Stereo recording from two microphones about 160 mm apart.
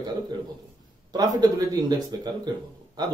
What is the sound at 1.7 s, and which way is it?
Speech, 20° right (ahead or behind).